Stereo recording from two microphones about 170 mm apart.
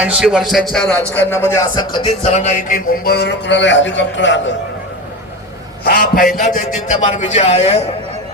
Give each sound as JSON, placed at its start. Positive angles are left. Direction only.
{"t": 0.0, "sound": "speech", "side_deg": -5}
{"t": 2.2, "sound": "a man's voice", "side_deg": 40}
{"t": 5.8, "sound": "a man's voice", "side_deg": 60}